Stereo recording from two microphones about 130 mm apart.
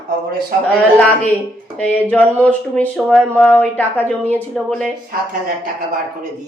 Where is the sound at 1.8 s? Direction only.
10° left (ahead or behind).